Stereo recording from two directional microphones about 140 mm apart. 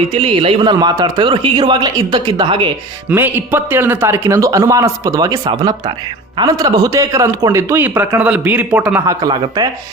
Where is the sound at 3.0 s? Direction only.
15° right (ahead or behind).